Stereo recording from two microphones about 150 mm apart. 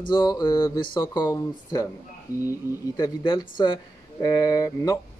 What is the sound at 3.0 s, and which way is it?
Speech, 30° left (ahead or behind).